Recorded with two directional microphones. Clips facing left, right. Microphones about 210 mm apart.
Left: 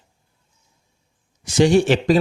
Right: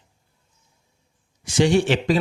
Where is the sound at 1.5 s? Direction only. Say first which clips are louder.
Left 3 dB; 40° left (ahead or behind).